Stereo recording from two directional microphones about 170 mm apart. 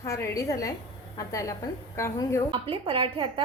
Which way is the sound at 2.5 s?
30° right (ahead or behind).